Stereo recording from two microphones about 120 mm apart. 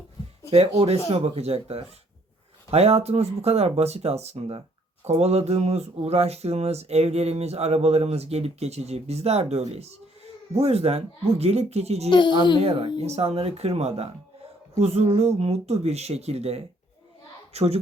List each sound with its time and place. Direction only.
0.5 s speech: 55° right (ahead or behind)
12.5 s speech: 50° right (ahead or behind)
13.0 s a child's voice: 60° right (ahead or behind)